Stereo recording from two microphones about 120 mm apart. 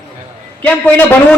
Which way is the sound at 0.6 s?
10° left (ahead or behind).